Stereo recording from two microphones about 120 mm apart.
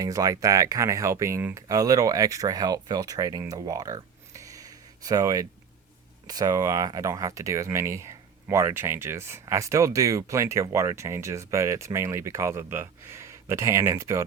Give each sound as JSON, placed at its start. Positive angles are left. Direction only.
{"t": 0.0, "sound": "speech", "side_deg": -30}
{"t": 3.5, "sound": "a sound", "side_deg": -30}
{"t": 6.2, "sound": "speech", "side_deg": -30}